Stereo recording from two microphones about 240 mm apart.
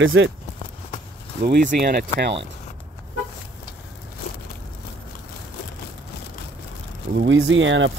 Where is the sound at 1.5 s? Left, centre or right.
Right.